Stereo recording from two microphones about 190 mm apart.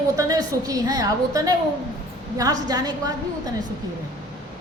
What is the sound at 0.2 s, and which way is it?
A woman's voice, 20° right (ahead or behind).